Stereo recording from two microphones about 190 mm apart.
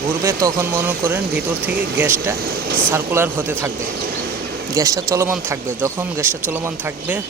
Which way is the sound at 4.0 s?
50° right (ahead or behind).